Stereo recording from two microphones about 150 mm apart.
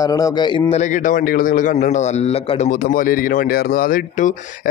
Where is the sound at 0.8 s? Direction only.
55° left (ahead or behind).